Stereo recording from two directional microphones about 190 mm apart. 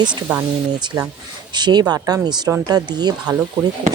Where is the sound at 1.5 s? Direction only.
20° right (ahead or behind).